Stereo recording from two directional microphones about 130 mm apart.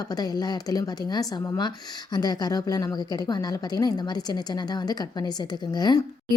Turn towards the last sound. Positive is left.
turn(degrees=35)  # may be behind; listen again after turning